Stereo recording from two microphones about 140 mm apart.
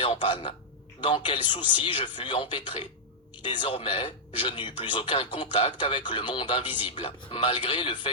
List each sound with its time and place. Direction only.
0.0 s speech: 35° left (ahead or behind)